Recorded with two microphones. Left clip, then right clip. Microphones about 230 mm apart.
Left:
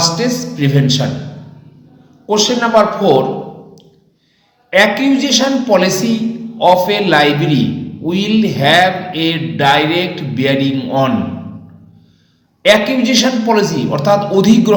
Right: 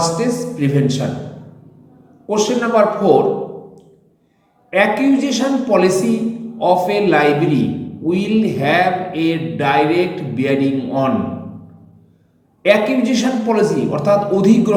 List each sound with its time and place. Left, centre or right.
0.0 s a man's voice: centre
2.2 s a man's voice: centre
4.7 s a man's voice: centre
12.6 s a man's voice: centre